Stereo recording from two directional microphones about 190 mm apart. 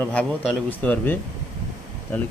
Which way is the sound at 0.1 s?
5° left (ahead or behind).